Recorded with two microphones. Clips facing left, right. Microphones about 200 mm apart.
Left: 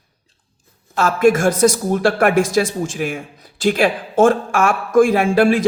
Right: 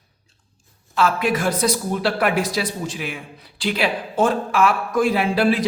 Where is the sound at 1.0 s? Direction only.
45° left (ahead or behind).